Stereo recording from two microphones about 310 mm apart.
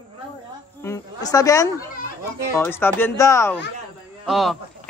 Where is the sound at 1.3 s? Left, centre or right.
Centre.